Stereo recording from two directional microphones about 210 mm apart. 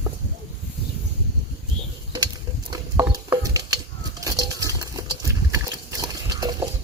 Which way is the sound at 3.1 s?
15° right (ahead or behind).